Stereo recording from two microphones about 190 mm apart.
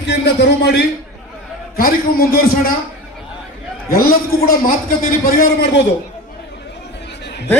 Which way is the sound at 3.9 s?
50° left (ahead or behind).